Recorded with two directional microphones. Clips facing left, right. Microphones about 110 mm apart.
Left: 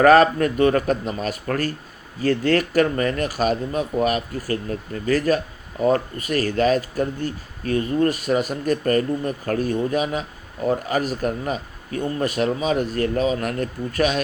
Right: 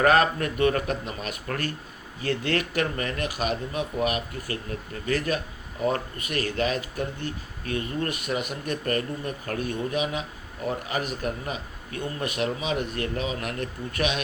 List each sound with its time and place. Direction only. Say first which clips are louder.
0.0 s speech: left 7 dB; 40° left (ahead or behind)